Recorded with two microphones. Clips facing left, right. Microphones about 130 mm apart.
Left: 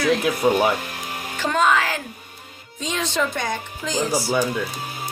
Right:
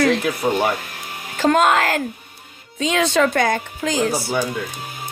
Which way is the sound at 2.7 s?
80° right.